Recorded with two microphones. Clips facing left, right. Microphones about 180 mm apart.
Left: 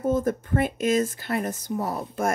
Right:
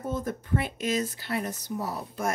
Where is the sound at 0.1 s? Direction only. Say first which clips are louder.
Left 4 dB; 50° left (ahead or behind).